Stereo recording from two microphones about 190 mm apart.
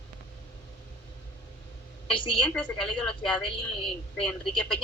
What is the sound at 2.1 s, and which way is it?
A woman's voice, 25° left (ahead or behind).